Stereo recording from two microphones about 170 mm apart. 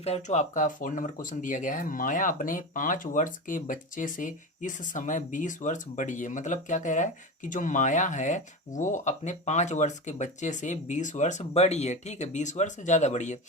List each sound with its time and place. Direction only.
0.0 s speech: 40° left (ahead or behind)